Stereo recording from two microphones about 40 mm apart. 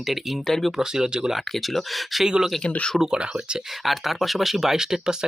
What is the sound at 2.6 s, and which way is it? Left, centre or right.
Speech, left.